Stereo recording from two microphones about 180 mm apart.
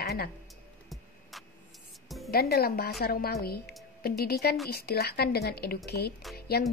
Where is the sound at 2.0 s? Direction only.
Centre (ahead or behind).